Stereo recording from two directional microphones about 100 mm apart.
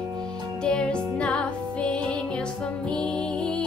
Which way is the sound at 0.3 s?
10° left (ahead or behind).